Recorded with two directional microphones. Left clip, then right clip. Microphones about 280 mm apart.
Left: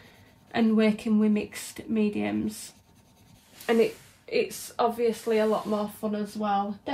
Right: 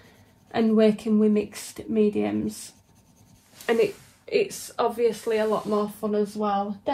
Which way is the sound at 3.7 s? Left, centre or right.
Right.